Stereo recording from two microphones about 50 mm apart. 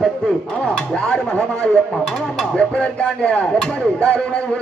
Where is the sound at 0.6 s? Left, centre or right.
Centre.